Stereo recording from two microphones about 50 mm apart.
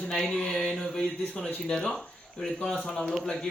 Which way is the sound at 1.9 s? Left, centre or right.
Centre.